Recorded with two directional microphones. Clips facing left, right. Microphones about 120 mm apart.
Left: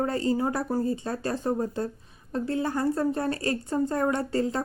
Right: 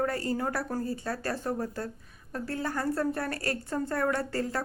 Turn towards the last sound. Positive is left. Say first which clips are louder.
# left 4 dB
turn(degrees=20)  # may be behind; listen again after turning